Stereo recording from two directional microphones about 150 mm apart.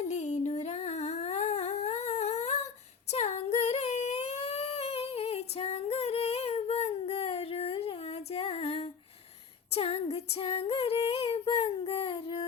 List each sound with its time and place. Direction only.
0.0 s humming: 50° left (ahead or behind)
3.1 s a sound: 45° left (ahead or behind)
9.7 s female singing: 40° left (ahead or behind)